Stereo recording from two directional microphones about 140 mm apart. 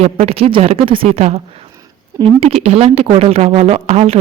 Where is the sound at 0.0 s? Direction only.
45° right (ahead or behind).